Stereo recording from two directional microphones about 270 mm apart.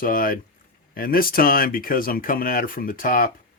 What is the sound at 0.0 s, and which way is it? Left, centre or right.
Speech, left.